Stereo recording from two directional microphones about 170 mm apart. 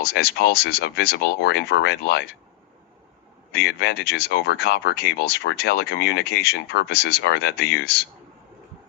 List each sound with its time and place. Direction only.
0.0 s speech: 70° left (ahead or behind)
3.5 s speech: 70° left (ahead or behind)